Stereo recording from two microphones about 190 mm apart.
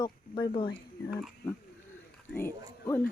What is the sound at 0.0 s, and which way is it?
Speech, 25° left (ahead or behind).